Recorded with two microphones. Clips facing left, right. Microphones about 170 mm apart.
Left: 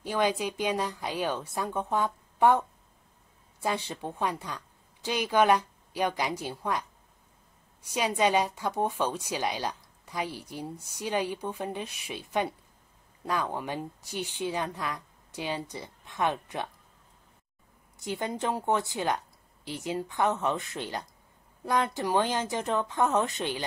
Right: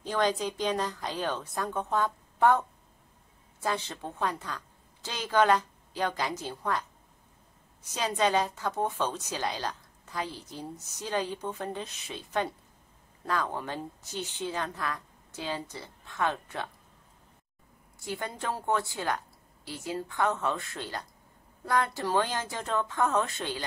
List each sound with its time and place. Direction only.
0.0 s a woman's voice: 10° left (ahead or behind)
3.6 s a woman's voice: 10° left (ahead or behind)
7.9 s a woman's voice: 10° left (ahead or behind)
17.9 s a woman's voice: 20° left (ahead or behind)